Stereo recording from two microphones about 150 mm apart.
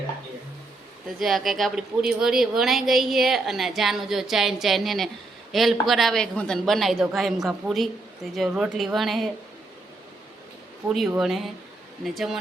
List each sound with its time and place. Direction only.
1.2 s a woman's voice: centre (ahead or behind)
11.2 s a woman's voice: centre (ahead or behind)